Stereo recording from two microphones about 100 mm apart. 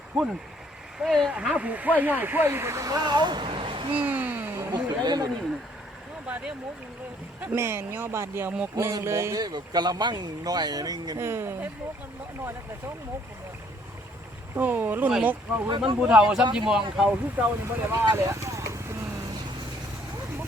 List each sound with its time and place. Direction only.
0.1 s speech: centre (ahead or behind)
1.3 s speech: 10° right (ahead or behind); by 3.9 s 60° right (ahead or behind)
3.9 s a sound: 15° right (ahead or behind)
4.7 s speech: 45° right (ahead or behind)
6.2 s a sound: 10° right (ahead or behind)
7.4 s speech: 25° right (ahead or behind)
8.7 s speech: 35° right (ahead or behind)
9.4 s speech: 45° right (ahead or behind)
11.2 s speech: 25° right (ahead or behind)
14.5 s speech: 20° right (ahead or behind)
18.1 s a sound: 30° right (ahead or behind)